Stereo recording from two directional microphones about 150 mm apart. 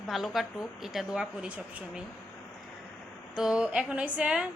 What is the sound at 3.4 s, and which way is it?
A woman's voice, 5° right (ahead or behind).